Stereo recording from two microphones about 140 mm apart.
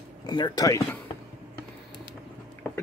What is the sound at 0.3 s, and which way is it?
Speech, 30° left (ahead or behind).